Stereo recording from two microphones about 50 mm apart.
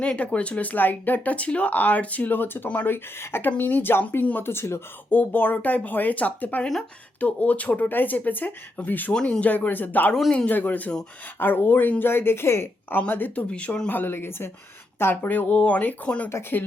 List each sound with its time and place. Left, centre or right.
0.0 s speech: left
3.6 s speech: left
4.4 s speech: left
5.1 s speech: left
9.1 s speech: centre
9.4 s speech: left
11.3 s speech: left
12.9 s speech: left
13.5 s speech: left
13.8 s speech: left
15.1 s speech: left